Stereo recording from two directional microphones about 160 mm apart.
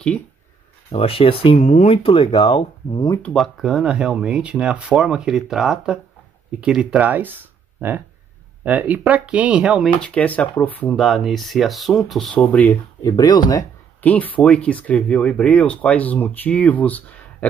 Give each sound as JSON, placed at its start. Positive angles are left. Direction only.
{"t": 0.9, "sound": "speech", "side_deg": 35}
{"t": 1.6, "sound": "speech", "side_deg": 50}
{"t": 2.0, "sound": "speech", "side_deg": 30}
{"t": 3.1, "sound": "speech", "side_deg": 10}
{"t": 10.0, "sound": "speech", "side_deg": 10}
{"t": 13.0, "sound": "speech", "side_deg": 25}
{"t": 14.0, "sound": "speech", "side_deg": 10}